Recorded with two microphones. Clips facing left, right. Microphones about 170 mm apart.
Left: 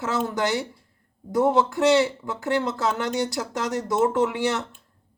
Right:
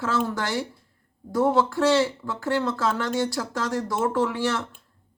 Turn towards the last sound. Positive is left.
turn(degrees=20)  # may be behind; listen again after turning